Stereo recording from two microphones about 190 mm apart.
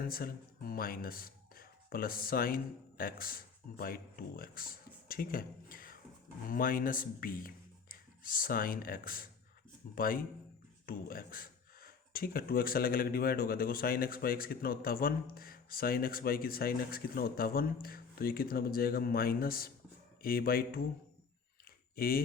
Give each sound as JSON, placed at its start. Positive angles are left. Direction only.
{"t": 0.0, "sound": "speech", "side_deg": 50}
{"t": 21.9, "sound": "speech", "side_deg": 50}